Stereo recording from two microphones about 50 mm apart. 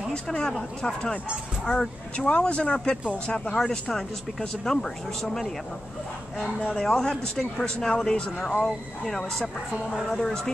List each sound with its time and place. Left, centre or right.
0.1 s speech: centre
6.7 s speech: centre